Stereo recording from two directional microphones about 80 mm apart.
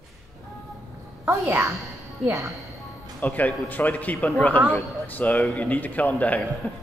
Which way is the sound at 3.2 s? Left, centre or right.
Left.